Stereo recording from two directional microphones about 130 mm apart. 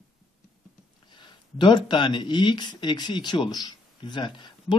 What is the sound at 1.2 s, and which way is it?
A man's voice, 35° left (ahead or behind).